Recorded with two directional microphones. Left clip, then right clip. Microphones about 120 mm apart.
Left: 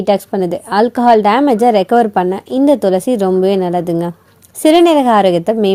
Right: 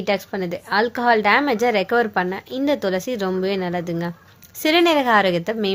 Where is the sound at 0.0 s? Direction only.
30° left (ahead or behind).